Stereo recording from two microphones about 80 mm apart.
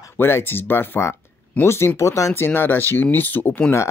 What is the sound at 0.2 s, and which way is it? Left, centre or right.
Speech, left.